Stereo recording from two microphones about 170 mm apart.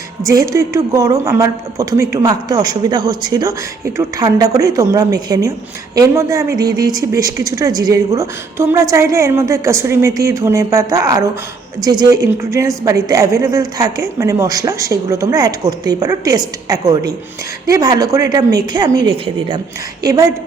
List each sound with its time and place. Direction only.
0.2 s a woman's voice: 20° right (ahead or behind)